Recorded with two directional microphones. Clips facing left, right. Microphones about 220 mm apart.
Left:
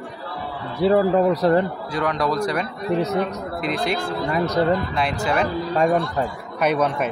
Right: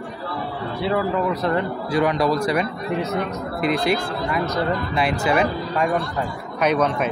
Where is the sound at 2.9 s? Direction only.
35° left (ahead or behind).